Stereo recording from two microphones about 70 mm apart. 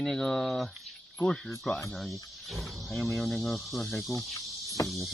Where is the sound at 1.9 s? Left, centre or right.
Centre.